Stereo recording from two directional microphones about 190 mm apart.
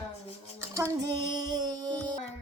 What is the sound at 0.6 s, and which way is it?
Music, 15° right (ahead or behind).